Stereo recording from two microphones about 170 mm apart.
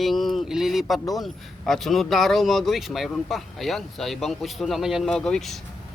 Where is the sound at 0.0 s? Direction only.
Centre (ahead or behind).